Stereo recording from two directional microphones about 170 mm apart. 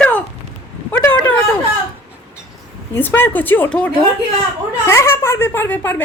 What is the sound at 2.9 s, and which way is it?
Speech, 10° left (ahead or behind).